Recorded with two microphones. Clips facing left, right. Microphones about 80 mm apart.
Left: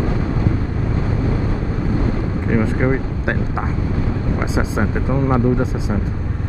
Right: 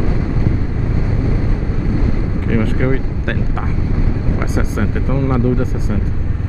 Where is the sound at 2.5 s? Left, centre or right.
Centre.